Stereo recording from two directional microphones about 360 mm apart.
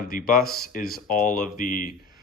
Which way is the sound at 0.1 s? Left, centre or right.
Left.